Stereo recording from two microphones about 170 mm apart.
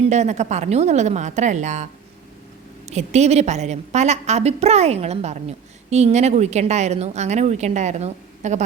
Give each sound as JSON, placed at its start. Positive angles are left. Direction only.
{"t": 0.1, "sound": "a woman's voice", "side_deg": -40}
{"t": 2.9, "sound": "a woman's voice", "side_deg": -40}